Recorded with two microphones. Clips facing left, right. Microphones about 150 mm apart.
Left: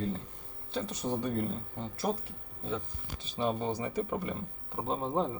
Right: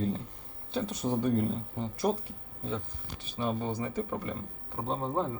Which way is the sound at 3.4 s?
20° left (ahead or behind).